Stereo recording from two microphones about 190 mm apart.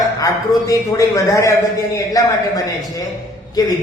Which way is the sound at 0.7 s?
15° left (ahead or behind).